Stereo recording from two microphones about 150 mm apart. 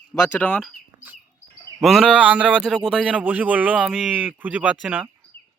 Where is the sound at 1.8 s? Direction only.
Centre (ahead or behind).